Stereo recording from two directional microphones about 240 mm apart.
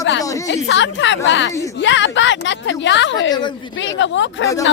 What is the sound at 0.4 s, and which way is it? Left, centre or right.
A man's voice, left.